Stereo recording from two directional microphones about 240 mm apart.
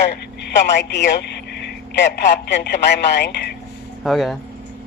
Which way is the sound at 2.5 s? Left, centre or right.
Left.